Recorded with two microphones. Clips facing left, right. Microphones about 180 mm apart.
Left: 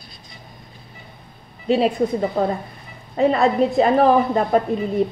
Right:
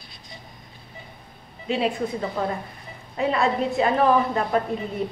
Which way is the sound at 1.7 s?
35° left (ahead or behind).